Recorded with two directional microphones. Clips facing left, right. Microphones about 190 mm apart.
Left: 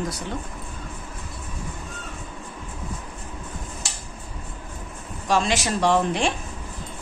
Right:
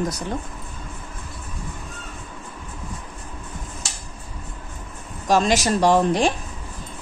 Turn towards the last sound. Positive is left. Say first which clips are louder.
# right 3 dB
turn(degrees=-40)  # may be behind; listen again after turning